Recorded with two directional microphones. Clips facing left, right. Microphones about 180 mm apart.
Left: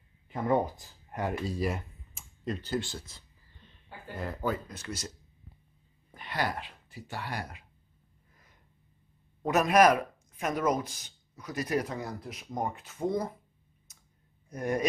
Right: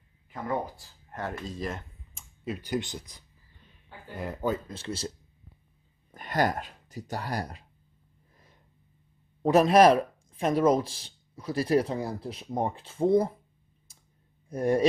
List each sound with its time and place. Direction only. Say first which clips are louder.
0.3 s speech: left 4 dB; 20° left (ahead or behind)
2.4 s a sound: right 1 dB; 10° right (ahead or behind)
4.2 s speech: right 3 dB; 15° right (ahead or behind)
6.1 s speech: right 6 dB; 45° right (ahead or behind)
9.4 s speech: right 4 dB; 30° right (ahead or behind)
13.9 s a sound: right 3 dB; 30° right (ahead or behind)
14.5 s speech: right 6 dB; 30° right (ahead or behind)